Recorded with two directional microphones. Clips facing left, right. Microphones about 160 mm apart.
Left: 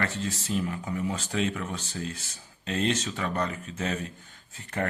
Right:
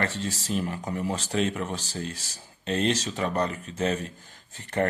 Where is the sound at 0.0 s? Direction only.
35° right (ahead or behind).